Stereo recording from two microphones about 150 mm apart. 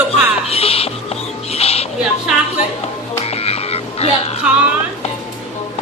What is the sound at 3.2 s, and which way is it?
Croak, 40° left (ahead or behind).